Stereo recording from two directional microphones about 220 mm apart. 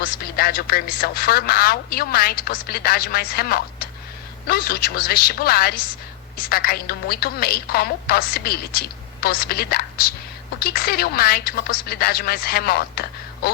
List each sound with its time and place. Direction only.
0.0 s speech: 40° left (ahead or behind)